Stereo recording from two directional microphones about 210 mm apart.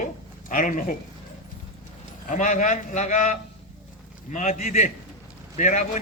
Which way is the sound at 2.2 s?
35° left (ahead or behind).